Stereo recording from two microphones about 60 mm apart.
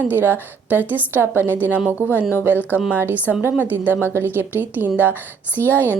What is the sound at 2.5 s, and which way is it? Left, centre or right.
A woman's voice, right.